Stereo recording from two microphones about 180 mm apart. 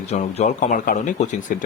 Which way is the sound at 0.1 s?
40° left (ahead or behind).